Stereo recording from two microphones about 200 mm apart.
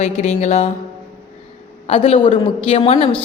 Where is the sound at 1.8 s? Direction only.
30° left (ahead or behind).